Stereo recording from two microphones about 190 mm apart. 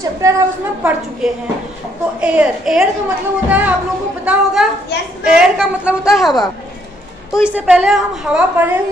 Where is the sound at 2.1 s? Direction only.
5° right (ahead or behind).